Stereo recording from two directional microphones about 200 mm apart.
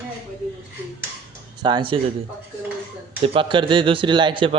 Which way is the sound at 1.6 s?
25° right (ahead or behind).